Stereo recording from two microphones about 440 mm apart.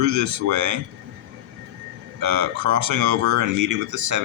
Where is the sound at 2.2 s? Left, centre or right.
Right.